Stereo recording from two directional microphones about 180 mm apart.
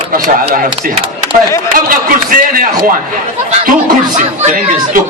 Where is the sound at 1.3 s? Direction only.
45° right (ahead or behind).